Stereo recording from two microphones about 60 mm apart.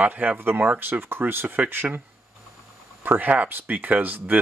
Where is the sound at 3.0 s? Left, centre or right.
Right.